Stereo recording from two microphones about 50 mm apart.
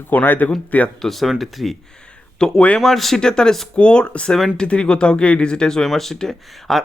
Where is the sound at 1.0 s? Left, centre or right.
Centre.